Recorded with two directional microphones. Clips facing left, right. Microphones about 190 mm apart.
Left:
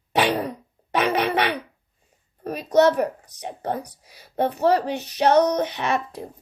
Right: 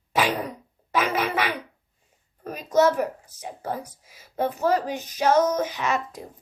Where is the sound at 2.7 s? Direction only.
35° left (ahead or behind).